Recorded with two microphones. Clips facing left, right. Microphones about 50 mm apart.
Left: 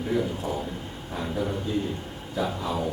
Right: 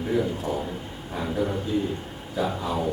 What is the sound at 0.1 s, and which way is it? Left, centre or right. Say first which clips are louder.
A man's voice: right 2 dB; centre.